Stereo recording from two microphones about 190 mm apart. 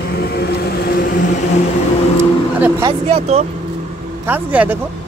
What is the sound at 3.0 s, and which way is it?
Speech, 35° right (ahead or behind).